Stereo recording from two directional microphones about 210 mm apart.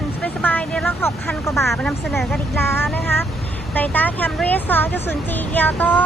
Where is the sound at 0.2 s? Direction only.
5° left (ahead or behind).